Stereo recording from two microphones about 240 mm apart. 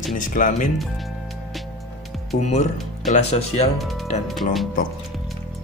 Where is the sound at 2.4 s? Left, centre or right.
Left.